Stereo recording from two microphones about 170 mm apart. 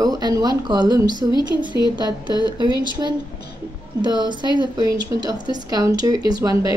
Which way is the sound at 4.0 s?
25° right (ahead or behind).